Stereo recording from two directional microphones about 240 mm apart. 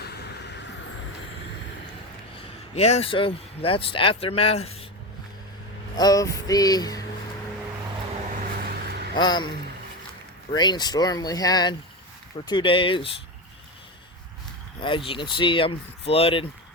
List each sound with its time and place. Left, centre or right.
0.0 s vehicle: left
2.7 s a man's voice: left
6.0 s speech: centre
8.9 s a sound: right
9.1 s speech: centre
10.5 s a man's voice: centre
14.8 s a man's voice: left